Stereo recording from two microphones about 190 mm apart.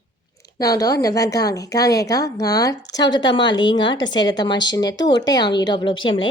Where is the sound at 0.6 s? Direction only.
20° left (ahead or behind).